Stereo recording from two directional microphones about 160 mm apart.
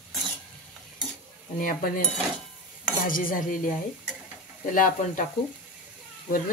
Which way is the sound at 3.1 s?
60° left (ahead or behind).